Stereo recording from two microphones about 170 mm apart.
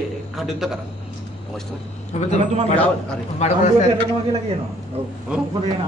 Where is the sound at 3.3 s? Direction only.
40° left (ahead or behind).